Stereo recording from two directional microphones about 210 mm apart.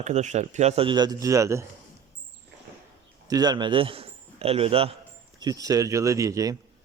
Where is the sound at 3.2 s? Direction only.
20° right (ahead or behind).